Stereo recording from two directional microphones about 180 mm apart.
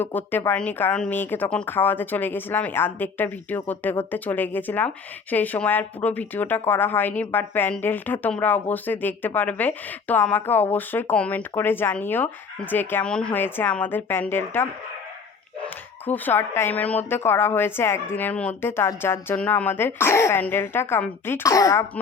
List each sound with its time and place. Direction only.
0.0 s a woman's voice: 10° left (ahead or behind)